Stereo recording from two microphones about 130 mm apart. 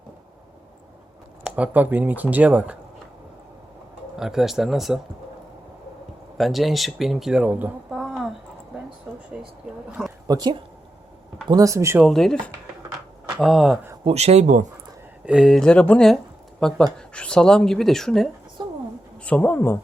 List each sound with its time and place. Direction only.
1.5 s speech: 10° right (ahead or behind)
4.2 s speech: 5° right (ahead or behind)
6.3 s speech: centre (ahead or behind)
7.9 s a sound: centre (ahead or behind)
9.3 s speech: 5° right (ahead or behind)
10.2 s speech: 30° right (ahead or behind)
12.0 s speech: 5° left (ahead or behind)
14.0 s speech: 55° right (ahead or behind); by 14.7 s 75° right (ahead or behind)
15.3 s speech: centre (ahead or behind); by 19.8 s 15° left (ahead or behind)